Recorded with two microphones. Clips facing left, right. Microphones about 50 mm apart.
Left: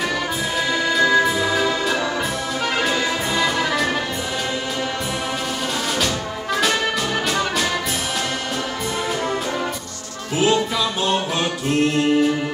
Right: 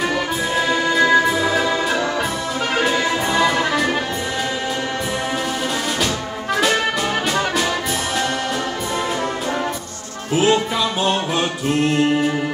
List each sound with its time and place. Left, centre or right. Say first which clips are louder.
0.8 s music: right 1 dB; centre
1.2 s music: right 1 dB; centre
10.4 s music: right 1 dB; right